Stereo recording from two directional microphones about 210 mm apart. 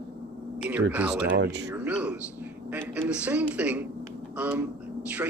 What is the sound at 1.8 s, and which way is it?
Speech, 5° right (ahead or behind).